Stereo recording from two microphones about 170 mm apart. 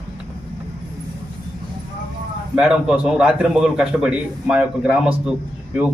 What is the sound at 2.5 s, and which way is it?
A man's voice, 5° right (ahead or behind).